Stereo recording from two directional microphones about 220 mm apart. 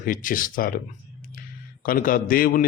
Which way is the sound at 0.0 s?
40° left (ahead or behind).